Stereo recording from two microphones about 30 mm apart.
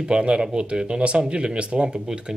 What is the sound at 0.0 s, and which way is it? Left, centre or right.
Speech, right.